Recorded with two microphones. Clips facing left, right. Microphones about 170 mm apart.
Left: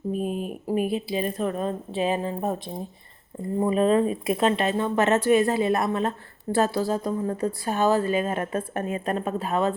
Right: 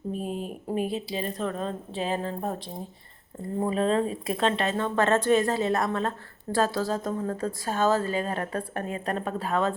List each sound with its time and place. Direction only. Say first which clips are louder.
0.1 s a woman's voice: left 4 dB; 15° left (ahead or behind)
3.6 s speech: left 4 dB; 15° left (ahead or behind)